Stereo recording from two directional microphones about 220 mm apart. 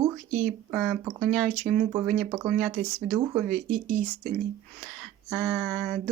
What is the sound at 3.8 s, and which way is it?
Speech, 40° right (ahead or behind).